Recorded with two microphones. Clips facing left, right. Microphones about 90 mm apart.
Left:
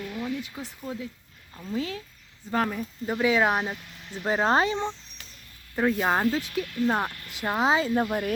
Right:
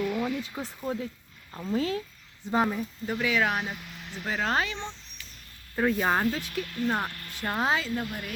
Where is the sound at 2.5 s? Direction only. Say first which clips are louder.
Right 1 dB; 10° right (ahead or behind).